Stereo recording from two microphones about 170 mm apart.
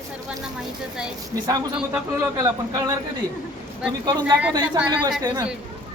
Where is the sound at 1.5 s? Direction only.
15° right (ahead or behind).